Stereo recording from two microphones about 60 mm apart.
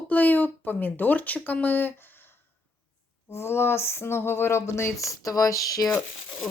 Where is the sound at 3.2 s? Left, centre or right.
Left.